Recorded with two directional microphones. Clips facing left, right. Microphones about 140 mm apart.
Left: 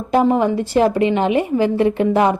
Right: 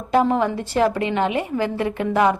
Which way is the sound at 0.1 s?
15° left (ahead or behind).